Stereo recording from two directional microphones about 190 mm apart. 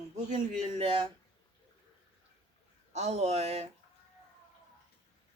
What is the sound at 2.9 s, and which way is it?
Speech, 35° right (ahead or behind).